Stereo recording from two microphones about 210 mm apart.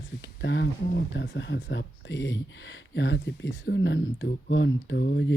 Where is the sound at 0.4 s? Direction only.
60° left (ahead or behind).